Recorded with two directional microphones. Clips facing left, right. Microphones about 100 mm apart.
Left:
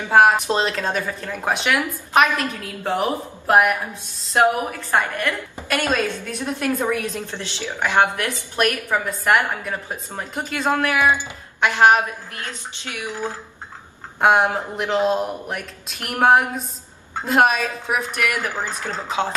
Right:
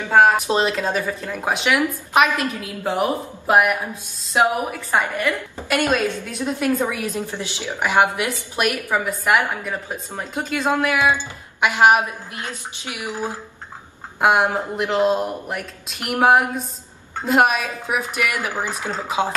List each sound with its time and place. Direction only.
0.5 s a woman's voice: 10° right (ahead or behind)
11.6 s a woman's voice: 15° right (ahead or behind)
14.2 s a woman's voice: 5° right (ahead or behind)